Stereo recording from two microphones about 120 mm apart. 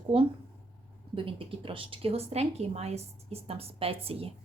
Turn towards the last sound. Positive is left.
turn(degrees=-55)  # may be behind; listen again after turning